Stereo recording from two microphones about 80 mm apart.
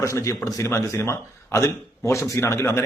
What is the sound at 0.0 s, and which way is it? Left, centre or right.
A man's voice, left.